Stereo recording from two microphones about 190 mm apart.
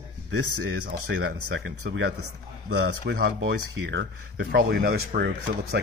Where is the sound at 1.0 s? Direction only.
70° right (ahead or behind).